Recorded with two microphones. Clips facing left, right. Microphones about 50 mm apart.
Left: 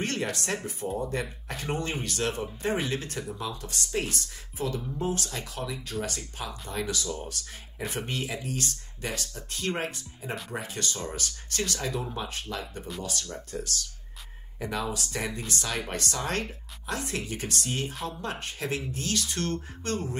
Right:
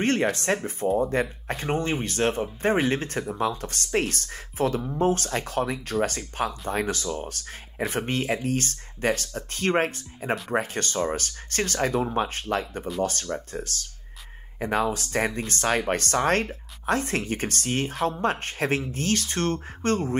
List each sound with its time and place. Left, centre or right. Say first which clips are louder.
0.0 s speech: right 7 dB; right